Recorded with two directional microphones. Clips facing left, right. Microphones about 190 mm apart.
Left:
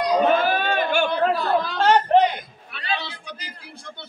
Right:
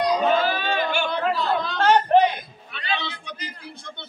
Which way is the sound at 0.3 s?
55° left (ahead or behind).